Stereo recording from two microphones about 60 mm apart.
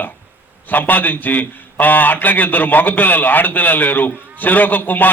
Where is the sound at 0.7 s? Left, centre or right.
Left.